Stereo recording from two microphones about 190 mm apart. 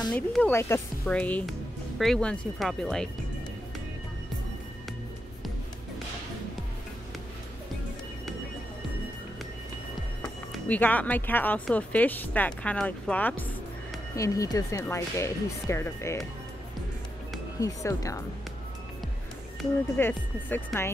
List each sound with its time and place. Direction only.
0.1 s speech: 5° left (ahead or behind)
10.5 s speech: 10° left (ahead or behind)
17.6 s speech: 15° left (ahead or behind)
20.0 s speech: 10° left (ahead or behind)